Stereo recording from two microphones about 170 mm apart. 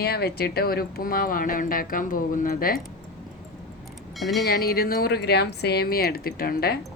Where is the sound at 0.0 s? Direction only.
70° left (ahead or behind).